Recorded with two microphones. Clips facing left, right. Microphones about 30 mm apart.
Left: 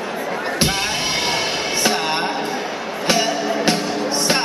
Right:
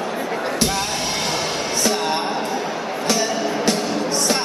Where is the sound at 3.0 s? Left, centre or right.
Left.